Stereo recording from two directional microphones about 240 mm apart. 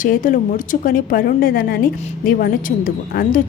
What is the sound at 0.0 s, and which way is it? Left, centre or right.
Speech, left.